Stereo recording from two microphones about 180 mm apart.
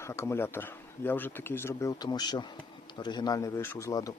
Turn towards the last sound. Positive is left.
turn(degrees=20)  # may be behind; listen again after turning